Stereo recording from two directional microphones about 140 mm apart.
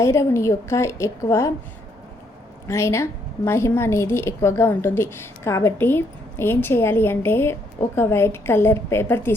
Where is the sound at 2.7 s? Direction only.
20° left (ahead or behind).